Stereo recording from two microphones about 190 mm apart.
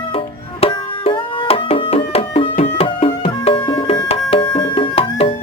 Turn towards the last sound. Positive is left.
turn(degrees=30)  # may be behind; listen again after turning